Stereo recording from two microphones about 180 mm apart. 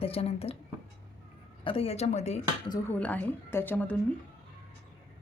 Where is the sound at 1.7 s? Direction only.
35° left (ahead or behind).